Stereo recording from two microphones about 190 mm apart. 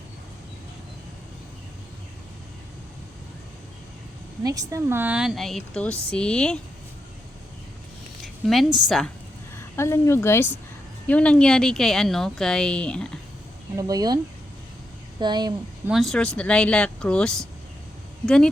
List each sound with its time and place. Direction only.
4.4 s a woman's voice: 20° right (ahead or behind); by 6.6 s 5° left (ahead or behind)
8.2 s a woman's voice: centre (ahead or behind)
9.7 s a woman's voice: 15° left (ahead or behind)
13.7 s speech: 20° right (ahead or behind)
15.2 s speech: 20° right (ahead or behind)
15.9 s a woman's voice: centre (ahead or behind)